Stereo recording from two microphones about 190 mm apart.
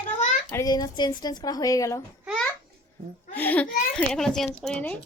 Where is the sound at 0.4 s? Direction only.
15° left (ahead or behind).